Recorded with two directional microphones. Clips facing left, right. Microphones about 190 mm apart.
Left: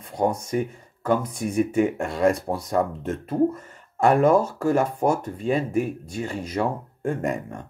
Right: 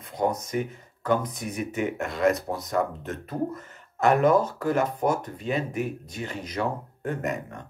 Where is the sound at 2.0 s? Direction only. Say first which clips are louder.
Left 2 dB; 30° left (ahead or behind).